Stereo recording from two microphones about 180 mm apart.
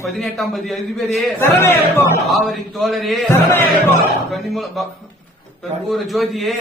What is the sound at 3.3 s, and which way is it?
Speech, 15° left (ahead or behind).